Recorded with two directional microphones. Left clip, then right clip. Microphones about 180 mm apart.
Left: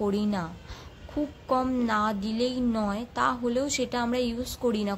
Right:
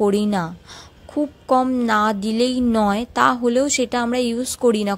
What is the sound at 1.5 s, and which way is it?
A woman's voice, 35° right (ahead or behind).